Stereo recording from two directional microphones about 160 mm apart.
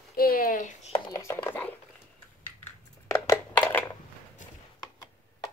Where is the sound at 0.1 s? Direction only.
65° left (ahead or behind).